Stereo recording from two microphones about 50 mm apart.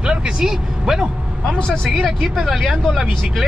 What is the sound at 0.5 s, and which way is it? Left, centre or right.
Speech, centre.